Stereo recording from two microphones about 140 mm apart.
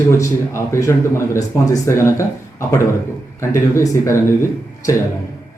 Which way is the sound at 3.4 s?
20° left (ahead or behind).